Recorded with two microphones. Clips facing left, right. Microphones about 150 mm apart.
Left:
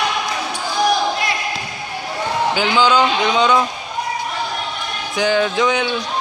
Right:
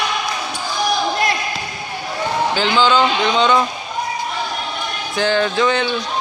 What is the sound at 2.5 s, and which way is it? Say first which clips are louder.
A man's voice: even; 10° left (ahead or behind).